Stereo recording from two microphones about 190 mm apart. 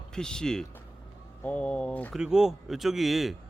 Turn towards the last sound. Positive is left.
turn(degrees=0)  # may be behind; listen again after turning